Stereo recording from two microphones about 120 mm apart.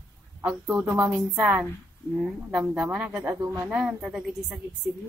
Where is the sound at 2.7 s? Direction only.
10° right (ahead or behind).